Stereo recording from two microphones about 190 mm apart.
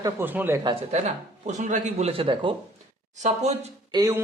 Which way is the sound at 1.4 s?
40° right (ahead or behind).